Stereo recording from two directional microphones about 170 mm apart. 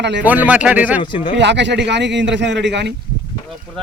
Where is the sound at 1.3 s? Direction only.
90° right.